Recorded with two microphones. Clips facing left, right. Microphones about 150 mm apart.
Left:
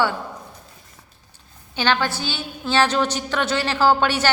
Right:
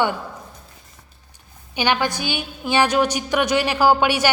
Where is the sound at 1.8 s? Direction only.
15° right (ahead or behind).